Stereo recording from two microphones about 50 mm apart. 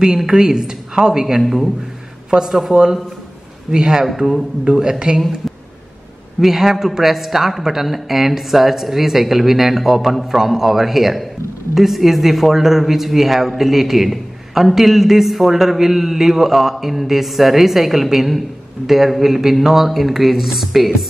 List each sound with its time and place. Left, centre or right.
0.2 s a woman's voice: centre
1.4 s a man's voice: centre
2.7 s a woman's voice: centre
4.0 s a man's voice: centre
4.6 s a woman's voice: centre
6.4 s a man's voice: centre